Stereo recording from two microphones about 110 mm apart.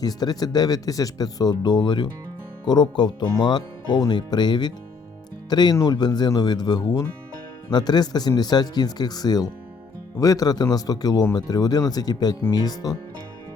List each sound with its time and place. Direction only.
0.0 s speech: 35° left (ahead or behind)